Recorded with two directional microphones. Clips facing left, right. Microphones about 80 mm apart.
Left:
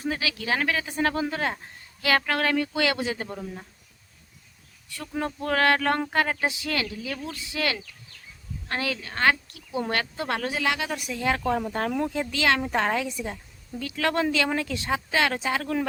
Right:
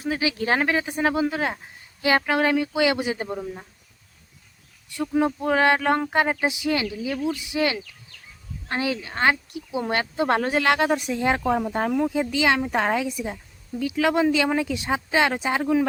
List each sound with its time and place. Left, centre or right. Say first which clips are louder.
0.2 s speech: right 5 dB; right
0.9 s speech: right 3 dB; centre
2.0 s speech: right 3 dB; right
5.1 s speech: right 5 dB; centre; by 10.5 s right
10.5 s speech: right 6 dB; right
10.8 s speech: right 5 dB; right
11.4 s speech: right 3 dB; centre